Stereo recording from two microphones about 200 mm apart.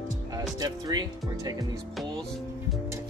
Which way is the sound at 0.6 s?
20° right (ahead or behind).